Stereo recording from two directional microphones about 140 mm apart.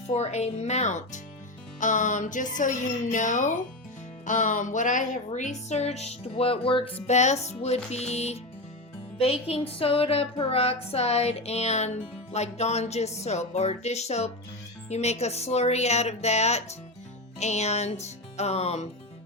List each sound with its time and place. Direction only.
0.1 s music: 50° left (ahead or behind)
1.8 s speech: 65° left (ahead or behind)
5.6 s music: 50° left (ahead or behind)
7.1 s music: 55° left (ahead or behind)